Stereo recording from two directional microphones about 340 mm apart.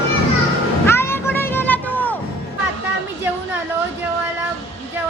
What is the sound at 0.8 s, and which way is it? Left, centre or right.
Music, centre.